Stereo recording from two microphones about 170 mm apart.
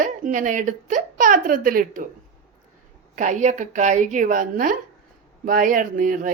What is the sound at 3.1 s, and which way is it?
A woman's voice, 45° right (ahead or behind).